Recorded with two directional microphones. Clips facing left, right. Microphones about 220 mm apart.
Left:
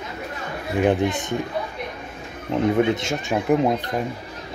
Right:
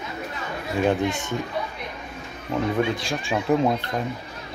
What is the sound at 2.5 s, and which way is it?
Speech, 20° left (ahead or behind).